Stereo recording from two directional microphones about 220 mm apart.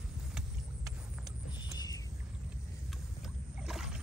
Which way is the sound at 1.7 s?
15° left (ahead or behind).